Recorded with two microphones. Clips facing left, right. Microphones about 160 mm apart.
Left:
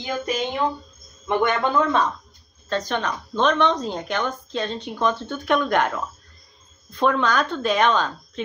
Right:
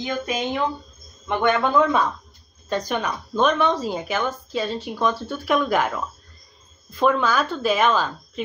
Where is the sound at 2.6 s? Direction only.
10° right (ahead or behind).